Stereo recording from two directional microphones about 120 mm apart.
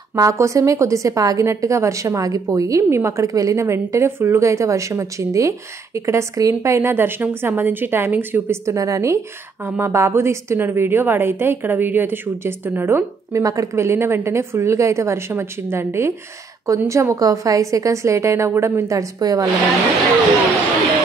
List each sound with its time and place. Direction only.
0.1 s a woman's voice: 25° right (ahead or behind)